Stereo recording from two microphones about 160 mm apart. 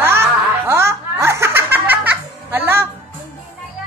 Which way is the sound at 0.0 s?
15° right (ahead or behind).